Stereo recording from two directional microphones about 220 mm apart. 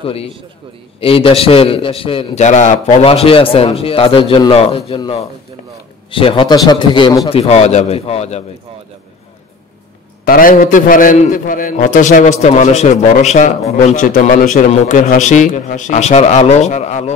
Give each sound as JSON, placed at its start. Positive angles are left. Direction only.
{"t": 0.0, "sound": "a man's voice", "side_deg": 25}
{"t": 10.2, "sound": "a man's voice", "side_deg": 40}